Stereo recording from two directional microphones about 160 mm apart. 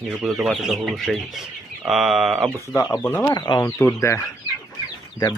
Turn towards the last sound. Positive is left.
turn(degrees=25)  # may be behind; listen again after turning